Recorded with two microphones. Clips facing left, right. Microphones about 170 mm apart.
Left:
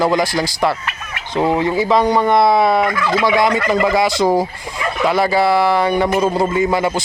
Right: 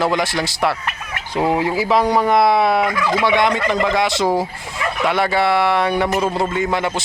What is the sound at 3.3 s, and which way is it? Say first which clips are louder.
Speech: left 2 dB; centre (ahead or behind).